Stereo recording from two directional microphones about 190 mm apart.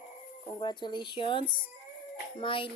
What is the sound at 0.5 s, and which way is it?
Speech, 25° left (ahead or behind).